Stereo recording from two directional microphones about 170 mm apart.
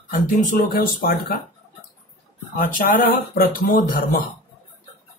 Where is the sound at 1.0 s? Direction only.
70° left (ahead or behind).